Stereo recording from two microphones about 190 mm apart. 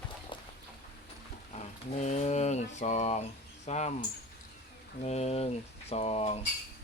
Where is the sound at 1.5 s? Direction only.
40° left (ahead or behind).